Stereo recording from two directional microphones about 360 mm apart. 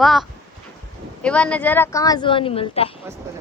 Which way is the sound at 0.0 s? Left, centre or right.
Centre.